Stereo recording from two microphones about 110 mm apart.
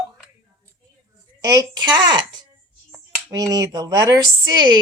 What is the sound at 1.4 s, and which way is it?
Speech, 35° right (ahead or behind).